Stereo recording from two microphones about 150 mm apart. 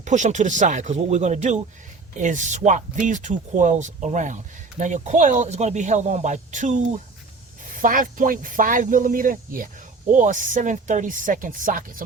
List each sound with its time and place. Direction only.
0.0 s speech: 55° right (ahead or behind)